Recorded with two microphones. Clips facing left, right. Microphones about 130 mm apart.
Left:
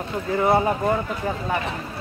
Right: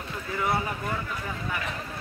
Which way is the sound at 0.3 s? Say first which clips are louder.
Left 9 dB; 45° left (ahead or behind).